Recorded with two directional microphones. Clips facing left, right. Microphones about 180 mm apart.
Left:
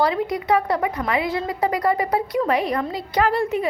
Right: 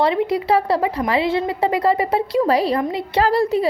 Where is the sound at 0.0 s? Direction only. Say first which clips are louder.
Right 3 dB; 25° right (ahead or behind).